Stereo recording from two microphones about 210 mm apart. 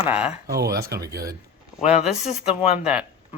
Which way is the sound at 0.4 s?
50° right (ahead or behind).